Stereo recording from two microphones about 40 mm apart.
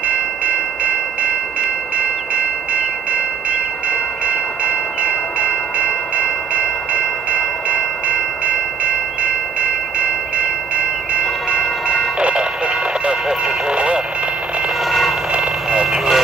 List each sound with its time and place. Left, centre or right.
0.1 s train: right
13.7 s radio: right
14.9 s a sound: centre
15.8 s vehicle: centre